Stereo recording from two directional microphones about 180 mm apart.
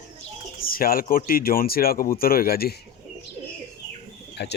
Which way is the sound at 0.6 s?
55° left (ahead or behind).